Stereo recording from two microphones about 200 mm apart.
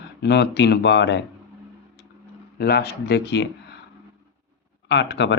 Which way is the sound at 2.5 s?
55° left (ahead or behind).